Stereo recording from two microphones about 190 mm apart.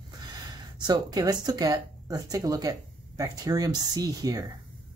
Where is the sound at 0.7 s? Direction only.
20° right (ahead or behind).